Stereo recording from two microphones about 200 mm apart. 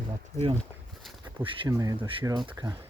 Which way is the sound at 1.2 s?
20° right (ahead or behind).